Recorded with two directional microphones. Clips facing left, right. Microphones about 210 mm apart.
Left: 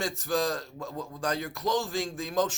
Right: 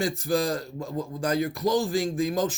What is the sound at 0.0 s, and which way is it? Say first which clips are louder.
A man's voice: right 3 dB; 5° right (ahead or behind).